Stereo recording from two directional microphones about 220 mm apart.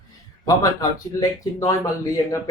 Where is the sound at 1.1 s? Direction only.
15° left (ahead or behind).